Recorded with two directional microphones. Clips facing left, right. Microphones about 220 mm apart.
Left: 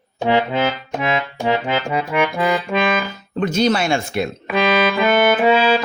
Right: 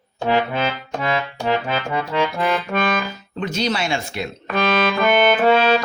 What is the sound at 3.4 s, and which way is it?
Speech, 50° left (ahead or behind).